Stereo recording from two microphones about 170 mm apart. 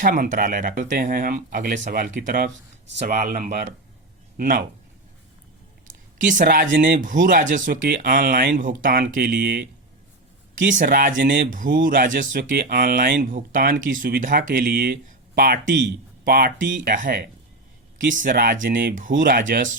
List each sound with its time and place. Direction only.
0.0 s speech: 55° right (ahead or behind)
3.0 s speech: 45° right (ahead or behind)
5.9 s speech: 50° right (ahead or behind)
9.3 s speech: 65° right (ahead or behind)
10.5 s speech: 50° right (ahead or behind)